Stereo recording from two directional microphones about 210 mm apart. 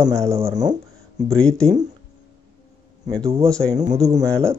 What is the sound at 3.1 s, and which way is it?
Speech, 20° right (ahead or behind).